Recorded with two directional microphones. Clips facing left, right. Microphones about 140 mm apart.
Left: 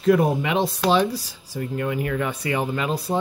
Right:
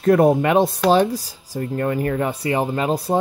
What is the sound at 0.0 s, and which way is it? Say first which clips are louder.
Speech: right 4 dB; 50° right (ahead or behind).